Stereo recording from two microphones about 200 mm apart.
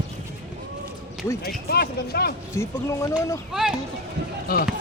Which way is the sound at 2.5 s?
15° left (ahead or behind).